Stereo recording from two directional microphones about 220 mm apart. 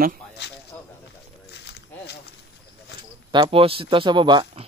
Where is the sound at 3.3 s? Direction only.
20° right (ahead or behind).